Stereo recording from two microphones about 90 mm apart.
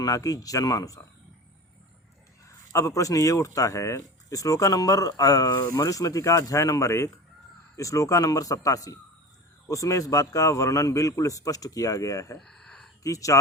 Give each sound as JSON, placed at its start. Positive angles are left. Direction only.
{"t": 0.0, "sound": "speech", "side_deg": 40}
{"t": 2.7, "sound": "speech", "side_deg": 35}
{"t": 12.4, "sound": "a sound", "side_deg": 5}
{"t": 13.0, "sound": "speech", "side_deg": 40}